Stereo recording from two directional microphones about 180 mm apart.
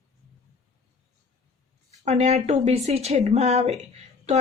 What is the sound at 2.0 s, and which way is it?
Speech, 35° right (ahead or behind).